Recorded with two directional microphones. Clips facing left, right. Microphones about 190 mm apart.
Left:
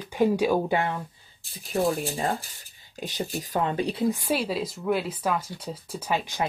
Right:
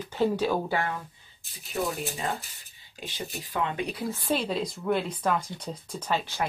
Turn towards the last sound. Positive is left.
turn(degrees=15)  # may be behind; listen again after turning